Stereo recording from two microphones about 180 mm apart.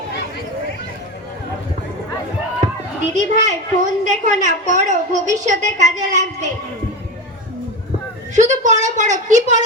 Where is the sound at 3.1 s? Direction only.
45° right (ahead or behind).